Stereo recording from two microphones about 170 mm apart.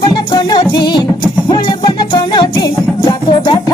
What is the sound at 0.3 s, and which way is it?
Music, 25° left (ahead or behind).